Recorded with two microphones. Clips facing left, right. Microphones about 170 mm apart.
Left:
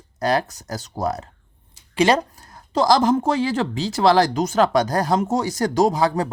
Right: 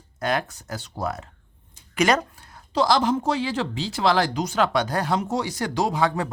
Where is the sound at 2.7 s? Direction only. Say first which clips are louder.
Left 4 dB; 45° left (ahead or behind).